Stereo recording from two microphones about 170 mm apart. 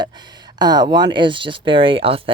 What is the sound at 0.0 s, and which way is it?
Speech, 25° right (ahead or behind).